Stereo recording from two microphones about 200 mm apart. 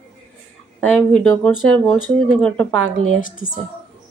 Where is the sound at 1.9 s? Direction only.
20° right (ahead or behind).